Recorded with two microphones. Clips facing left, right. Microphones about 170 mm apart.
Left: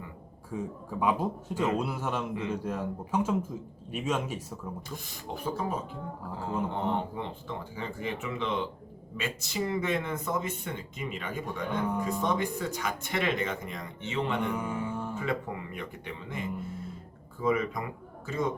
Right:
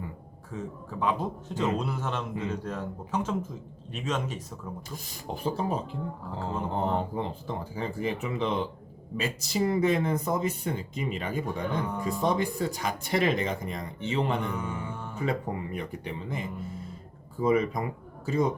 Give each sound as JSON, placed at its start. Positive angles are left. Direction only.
{"t": 0.5, "sound": "a man's voice", "side_deg": 10}
{"t": 5.4, "sound": "speech", "side_deg": -30}
{"t": 11.9, "sound": "a man's voice", "side_deg": 10}
{"t": 12.2, "sound": "speech", "side_deg": -35}
{"t": 14.4, "sound": "mantra", "side_deg": 10}
{"t": 15.3, "sound": "speech", "side_deg": -35}